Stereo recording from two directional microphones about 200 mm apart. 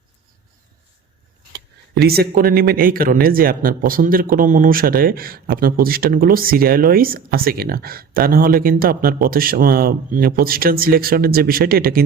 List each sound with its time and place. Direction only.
1.5 s speech: 50° right (ahead or behind)